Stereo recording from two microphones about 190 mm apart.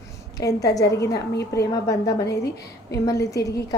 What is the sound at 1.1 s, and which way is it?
Speech, 60° left (ahead or behind).